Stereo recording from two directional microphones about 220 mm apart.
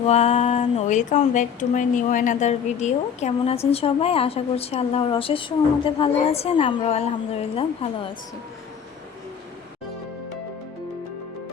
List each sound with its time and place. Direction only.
0.0 s speech: 30° left (ahead or behind)